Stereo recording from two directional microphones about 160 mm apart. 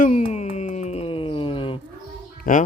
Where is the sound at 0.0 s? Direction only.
45° left (ahead or behind).